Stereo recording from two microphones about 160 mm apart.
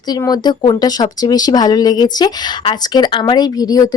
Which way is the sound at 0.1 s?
25° left (ahead or behind).